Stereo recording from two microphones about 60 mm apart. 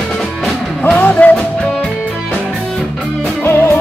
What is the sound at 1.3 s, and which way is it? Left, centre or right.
Music, centre.